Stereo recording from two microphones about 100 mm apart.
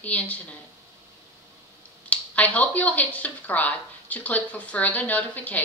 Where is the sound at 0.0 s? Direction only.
15° left (ahead or behind).